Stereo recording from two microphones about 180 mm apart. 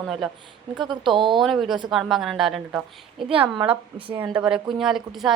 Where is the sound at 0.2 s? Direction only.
Centre (ahead or behind).